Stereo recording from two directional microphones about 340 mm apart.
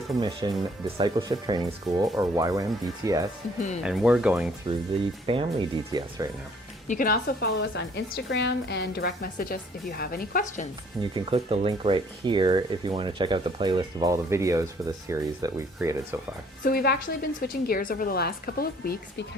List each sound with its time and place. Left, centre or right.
0.4 s speech: centre
5.2 s speech: centre
6.8 s a woman's voice: left
11.1 s speech: centre
16.6 s a woman's voice: left